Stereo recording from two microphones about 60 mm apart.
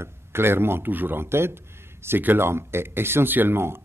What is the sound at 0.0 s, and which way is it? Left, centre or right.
Speech, right.